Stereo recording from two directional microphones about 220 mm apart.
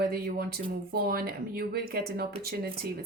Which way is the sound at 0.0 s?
45° right (ahead or behind).